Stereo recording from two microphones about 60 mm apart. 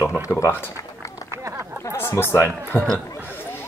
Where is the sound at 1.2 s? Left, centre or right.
Right.